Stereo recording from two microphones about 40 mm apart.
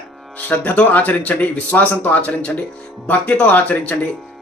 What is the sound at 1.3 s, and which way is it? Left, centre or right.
Speech, left.